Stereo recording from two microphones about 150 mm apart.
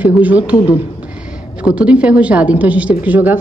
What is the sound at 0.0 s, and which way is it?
Speech, 10° right (ahead or behind).